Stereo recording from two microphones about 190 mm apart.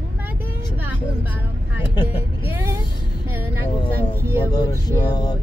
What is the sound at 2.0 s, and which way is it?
Vehicle, 10° right (ahead or behind).